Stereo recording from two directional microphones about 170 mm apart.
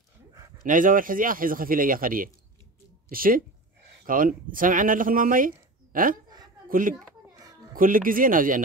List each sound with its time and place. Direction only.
0.7 s a child's voice: 50° right (ahead or behind)